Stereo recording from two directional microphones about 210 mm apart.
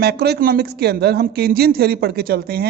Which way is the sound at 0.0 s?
50° right (ahead or behind).